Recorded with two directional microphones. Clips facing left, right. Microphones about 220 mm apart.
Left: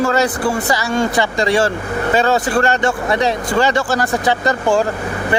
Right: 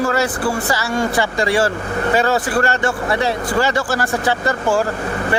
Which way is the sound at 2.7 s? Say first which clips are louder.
Left 2 dB; 20° left (ahead or behind).